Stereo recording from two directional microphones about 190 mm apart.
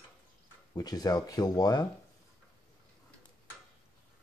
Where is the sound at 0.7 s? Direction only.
20° left (ahead or behind).